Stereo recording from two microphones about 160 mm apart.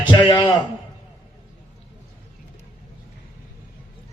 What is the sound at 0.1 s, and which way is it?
Speech, 30° left (ahead or behind).